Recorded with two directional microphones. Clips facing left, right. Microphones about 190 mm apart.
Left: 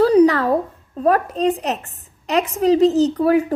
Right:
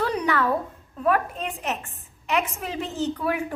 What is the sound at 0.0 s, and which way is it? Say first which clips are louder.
A woman's voice: left 11 dB; 35° left (ahead or behind).